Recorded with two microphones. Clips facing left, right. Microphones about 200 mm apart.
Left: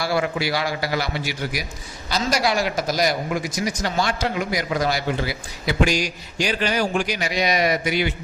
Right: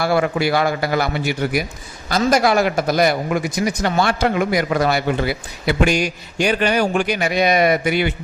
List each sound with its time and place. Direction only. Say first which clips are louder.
0.0 s a man's voice: right 5 dB; 55° right (ahead or behind)